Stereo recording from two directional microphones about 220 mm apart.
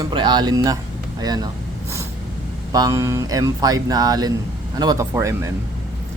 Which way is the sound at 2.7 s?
15° right (ahead or behind).